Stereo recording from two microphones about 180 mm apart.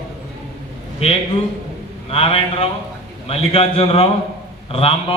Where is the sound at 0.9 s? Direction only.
35° left (ahead or behind).